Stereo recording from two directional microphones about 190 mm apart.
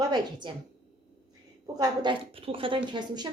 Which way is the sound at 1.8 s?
25° right (ahead or behind).